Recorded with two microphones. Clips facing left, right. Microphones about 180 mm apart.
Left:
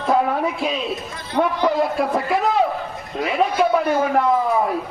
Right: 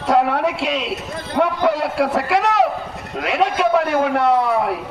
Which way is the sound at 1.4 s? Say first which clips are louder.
Right 1 dB; 75° right (ahead or behind).